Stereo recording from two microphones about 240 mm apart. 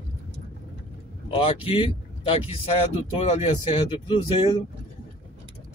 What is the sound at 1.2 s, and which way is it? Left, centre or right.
Speech, left.